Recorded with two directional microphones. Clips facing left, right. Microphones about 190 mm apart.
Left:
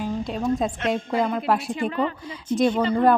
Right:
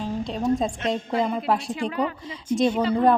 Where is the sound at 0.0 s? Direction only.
Centre (ahead or behind).